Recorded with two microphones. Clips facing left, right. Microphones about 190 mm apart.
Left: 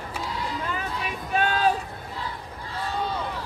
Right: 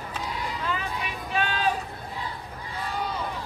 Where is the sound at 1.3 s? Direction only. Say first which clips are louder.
Left 4 dB; 45° left (ahead or behind).